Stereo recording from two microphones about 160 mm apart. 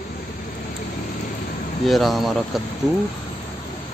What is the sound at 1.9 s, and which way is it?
Speech, centre (ahead or behind).